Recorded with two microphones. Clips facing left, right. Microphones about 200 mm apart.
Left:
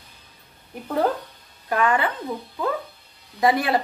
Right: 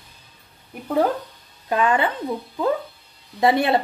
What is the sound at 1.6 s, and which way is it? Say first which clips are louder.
Speech: right 2 dB; 20° right (ahead or behind).